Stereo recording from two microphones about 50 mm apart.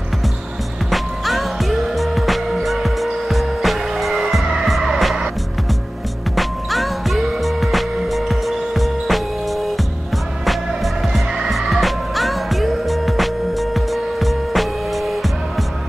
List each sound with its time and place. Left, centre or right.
0.8 s music: centre
6.3 s music: centre